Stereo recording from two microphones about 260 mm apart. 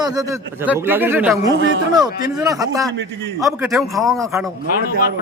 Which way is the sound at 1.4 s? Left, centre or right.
Right.